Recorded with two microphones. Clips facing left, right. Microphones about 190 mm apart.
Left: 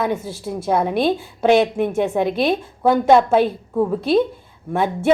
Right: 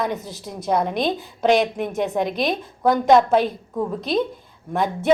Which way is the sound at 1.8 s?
55° left (ahead or behind).